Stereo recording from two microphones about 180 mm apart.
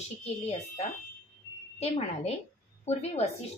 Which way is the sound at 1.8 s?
35° left (ahead or behind).